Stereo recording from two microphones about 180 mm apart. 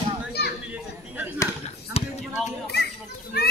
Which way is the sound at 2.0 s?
35° left (ahead or behind).